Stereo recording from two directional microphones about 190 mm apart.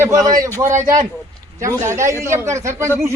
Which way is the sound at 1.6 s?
15° right (ahead or behind).